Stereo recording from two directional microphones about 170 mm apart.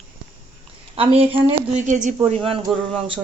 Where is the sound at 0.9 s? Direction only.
35° right (ahead or behind).